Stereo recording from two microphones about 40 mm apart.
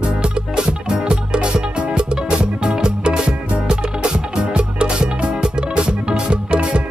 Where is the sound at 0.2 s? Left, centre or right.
Right.